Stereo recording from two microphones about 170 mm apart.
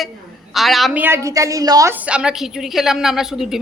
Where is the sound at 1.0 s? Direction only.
15° right (ahead or behind).